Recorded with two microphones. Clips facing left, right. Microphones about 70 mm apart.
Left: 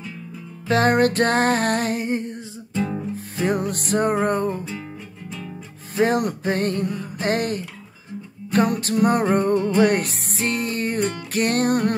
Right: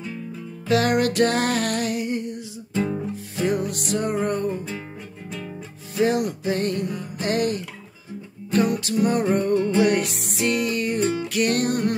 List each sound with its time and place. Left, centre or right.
0.7 s music: left
5.9 s music: left